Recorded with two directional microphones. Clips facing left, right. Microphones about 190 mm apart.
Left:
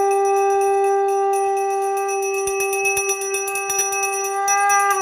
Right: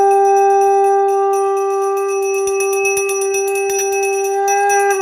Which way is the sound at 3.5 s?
35° right (ahead or behind).